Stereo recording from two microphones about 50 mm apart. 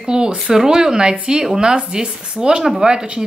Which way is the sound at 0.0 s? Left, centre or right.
Centre.